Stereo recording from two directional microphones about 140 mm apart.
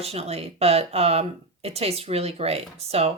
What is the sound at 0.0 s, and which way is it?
Speech, 45° right (ahead or behind).